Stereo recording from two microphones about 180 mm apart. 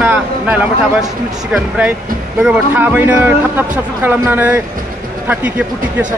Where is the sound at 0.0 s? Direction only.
10° right (ahead or behind).